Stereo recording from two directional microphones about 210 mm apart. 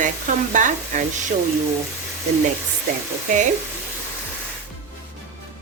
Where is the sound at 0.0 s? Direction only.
35° right (ahead or behind).